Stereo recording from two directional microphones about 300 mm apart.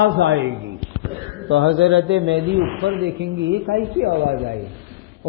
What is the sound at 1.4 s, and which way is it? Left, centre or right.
Speech, right.